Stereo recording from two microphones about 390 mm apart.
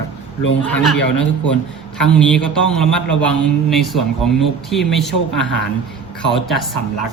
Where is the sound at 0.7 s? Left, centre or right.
Centre.